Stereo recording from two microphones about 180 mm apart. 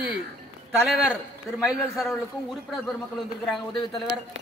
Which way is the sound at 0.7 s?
Centre (ahead or behind).